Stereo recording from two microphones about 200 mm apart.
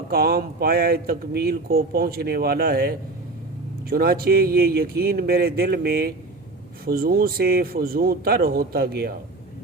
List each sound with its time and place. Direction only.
0.1 s speech: 50° right (ahead or behind)